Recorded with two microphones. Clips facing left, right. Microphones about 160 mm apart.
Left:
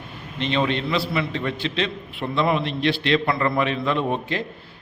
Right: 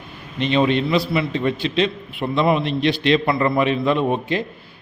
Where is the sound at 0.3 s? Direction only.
15° right (ahead or behind).